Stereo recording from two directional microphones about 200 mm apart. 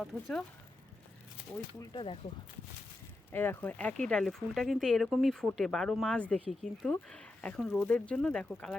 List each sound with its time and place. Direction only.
0.0 s speech: centre (ahead or behind)
1.8 s speech: 25° left (ahead or behind)
3.3 s speech: 10° left (ahead or behind)